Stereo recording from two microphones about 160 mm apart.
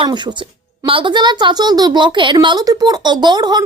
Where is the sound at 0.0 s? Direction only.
25° right (ahead or behind).